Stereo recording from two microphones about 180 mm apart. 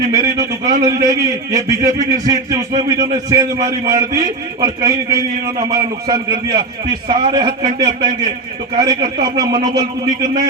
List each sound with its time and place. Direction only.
0.1 s a man's voice: 20° right (ahead or behind)